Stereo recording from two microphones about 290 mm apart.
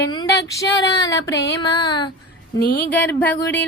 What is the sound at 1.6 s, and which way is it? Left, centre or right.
Speech, centre.